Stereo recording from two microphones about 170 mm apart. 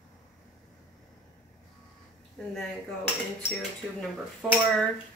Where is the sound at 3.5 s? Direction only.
10° left (ahead or behind).